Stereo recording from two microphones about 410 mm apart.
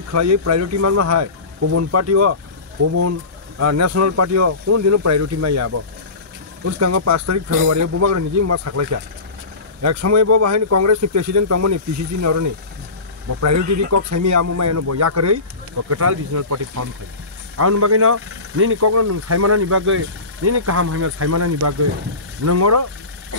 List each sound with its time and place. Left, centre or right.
0.1 s speech: right
6.8 s speech: right